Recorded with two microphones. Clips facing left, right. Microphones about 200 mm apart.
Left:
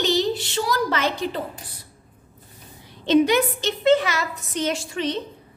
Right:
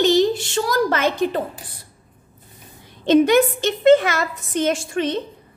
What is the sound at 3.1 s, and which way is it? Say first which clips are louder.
A woman's voice: right 4 dB; 50° right (ahead or behind).